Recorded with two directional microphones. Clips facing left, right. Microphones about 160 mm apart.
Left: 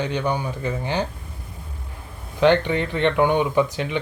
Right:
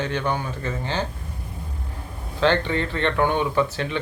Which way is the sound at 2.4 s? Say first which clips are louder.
Left 3 dB; 15° left (ahead or behind).